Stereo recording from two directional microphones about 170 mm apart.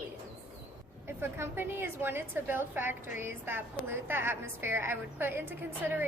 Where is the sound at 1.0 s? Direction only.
15° right (ahead or behind).